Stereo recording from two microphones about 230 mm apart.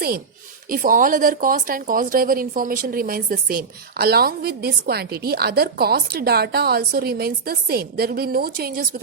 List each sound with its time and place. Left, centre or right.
0.7 s speech: right